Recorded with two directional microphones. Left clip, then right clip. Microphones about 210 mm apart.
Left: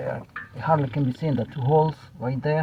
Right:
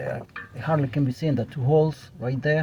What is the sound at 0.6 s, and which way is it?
Speech, 40° right (ahead or behind).